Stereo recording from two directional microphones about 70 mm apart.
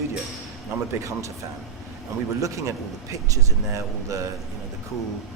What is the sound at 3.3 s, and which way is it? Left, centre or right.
Speech, right.